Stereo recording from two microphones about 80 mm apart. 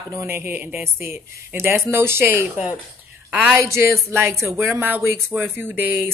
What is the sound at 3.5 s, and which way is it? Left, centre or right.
Speech, right.